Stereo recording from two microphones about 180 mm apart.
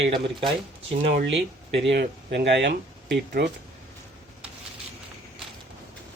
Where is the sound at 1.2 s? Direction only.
75° right (ahead or behind).